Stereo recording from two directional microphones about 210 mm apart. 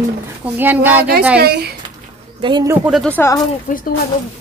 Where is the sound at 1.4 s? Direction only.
50° right (ahead or behind).